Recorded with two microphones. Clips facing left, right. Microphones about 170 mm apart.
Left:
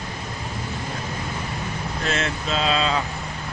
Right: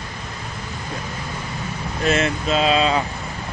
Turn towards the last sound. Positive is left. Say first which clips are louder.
# right 4 dB
turn(degrees=-10)  # may be behind; listen again after turning